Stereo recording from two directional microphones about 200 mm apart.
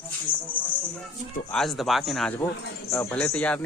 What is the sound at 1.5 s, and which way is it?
Speech, centre (ahead or behind).